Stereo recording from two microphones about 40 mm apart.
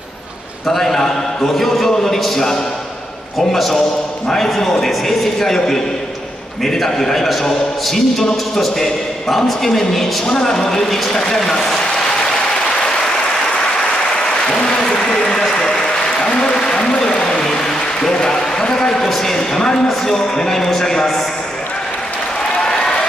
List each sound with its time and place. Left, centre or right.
0.7 s a man's voice: centre
14.1 s applause: centre
17.4 s a sound: centre
19.3 s a sound: centre
20.1 s a man's voice: centre
22.6 s run: centre